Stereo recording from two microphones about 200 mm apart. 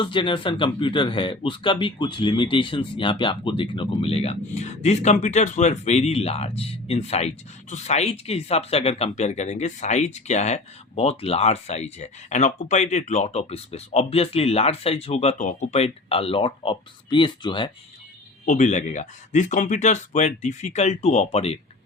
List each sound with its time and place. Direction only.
0.0 s speech: 25° left (ahead or behind)
18.4 s speech: 35° left (ahead or behind)